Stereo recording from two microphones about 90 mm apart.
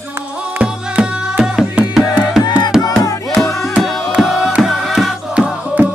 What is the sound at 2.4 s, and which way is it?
Music, 55° left (ahead or behind).